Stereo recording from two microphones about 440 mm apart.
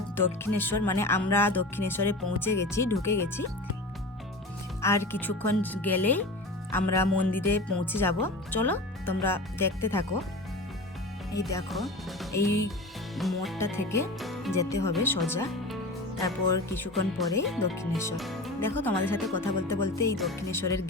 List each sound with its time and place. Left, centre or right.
0.2 s speech: centre
4.8 s speech: centre
11.3 s speech: centre
12.4 s speech: left
13.1 s speech: centre